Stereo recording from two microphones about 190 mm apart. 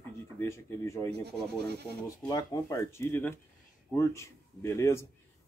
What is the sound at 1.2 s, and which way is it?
Speech, 60° right (ahead or behind).